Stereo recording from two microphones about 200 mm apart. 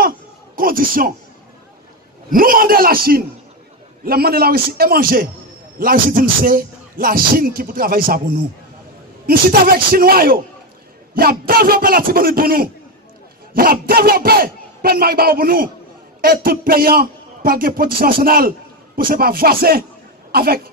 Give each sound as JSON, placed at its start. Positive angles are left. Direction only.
{"t": 0.6, "sound": "a man's voice", "side_deg": -45}
{"t": 2.3, "sound": "a man's voice", "side_deg": -45}
{"t": 9.2, "sound": "a man's voice", "side_deg": -50}